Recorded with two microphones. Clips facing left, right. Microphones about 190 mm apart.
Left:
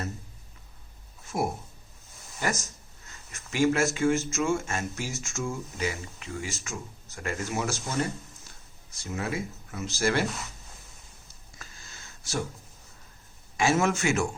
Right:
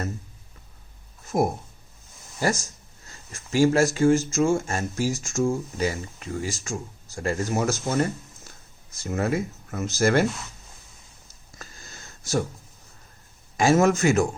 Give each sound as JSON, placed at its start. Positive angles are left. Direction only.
{"t": 2.4, "sound": "speech", "side_deg": -35}
{"t": 9.0, "sound": "speech", "side_deg": -50}
{"t": 11.5, "sound": "a sound", "side_deg": -40}
{"t": 13.6, "sound": "speech", "side_deg": -40}